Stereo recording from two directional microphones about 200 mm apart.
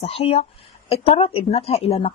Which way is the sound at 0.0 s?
30° left (ahead or behind).